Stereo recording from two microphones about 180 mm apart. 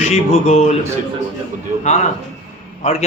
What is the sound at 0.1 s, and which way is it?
Speech, 35° left (ahead or behind).